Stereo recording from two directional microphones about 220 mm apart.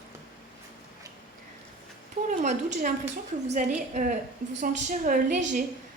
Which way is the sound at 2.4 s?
30° right (ahead or behind).